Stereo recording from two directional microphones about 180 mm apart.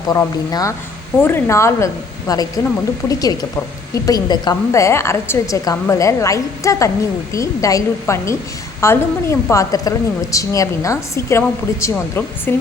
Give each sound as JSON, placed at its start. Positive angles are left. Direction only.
{"t": 0.1, "sound": "a woman's voice", "side_deg": 20}